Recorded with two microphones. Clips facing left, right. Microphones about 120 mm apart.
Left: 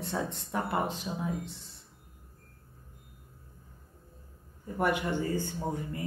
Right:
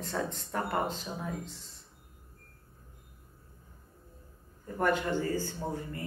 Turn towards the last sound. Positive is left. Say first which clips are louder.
# left 2 dB
turn(degrees=15)  # may be behind; listen again after turning